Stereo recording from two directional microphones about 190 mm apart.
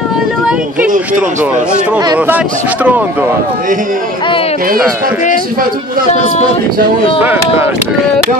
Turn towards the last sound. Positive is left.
turn(degrees=-10)  # may be behind; listen again after turning